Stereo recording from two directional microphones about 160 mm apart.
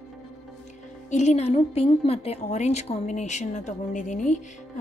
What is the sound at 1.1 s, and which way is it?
A woman's voice, 45° left (ahead or behind).